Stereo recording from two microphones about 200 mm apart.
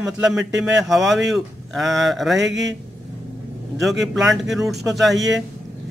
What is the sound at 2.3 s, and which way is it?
Mantra, 60° right (ahead or behind).